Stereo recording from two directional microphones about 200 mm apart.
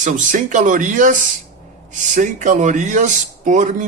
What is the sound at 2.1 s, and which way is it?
Speech, 40° right (ahead or behind).